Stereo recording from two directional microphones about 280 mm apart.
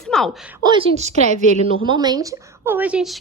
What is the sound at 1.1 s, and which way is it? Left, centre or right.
Speech, left.